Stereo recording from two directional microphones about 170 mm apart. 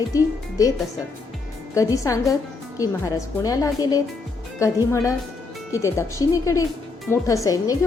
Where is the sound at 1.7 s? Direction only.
20° left (ahead or behind).